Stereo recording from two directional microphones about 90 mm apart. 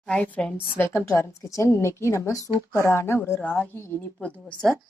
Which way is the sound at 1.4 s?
35° left (ahead or behind).